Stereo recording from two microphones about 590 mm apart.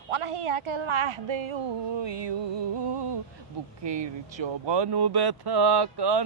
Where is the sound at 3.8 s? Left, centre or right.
Right.